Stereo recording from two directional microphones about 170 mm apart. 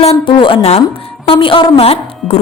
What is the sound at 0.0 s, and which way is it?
A woman's voice, 35° left (ahead or behind).